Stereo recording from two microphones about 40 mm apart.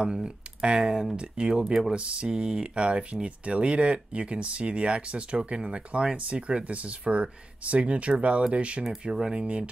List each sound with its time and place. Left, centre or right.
0.0 s speech: right
9.1 s speech: centre
9.4 s speech: right